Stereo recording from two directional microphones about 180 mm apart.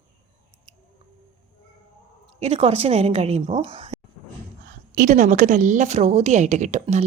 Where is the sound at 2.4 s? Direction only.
35° right (ahead or behind).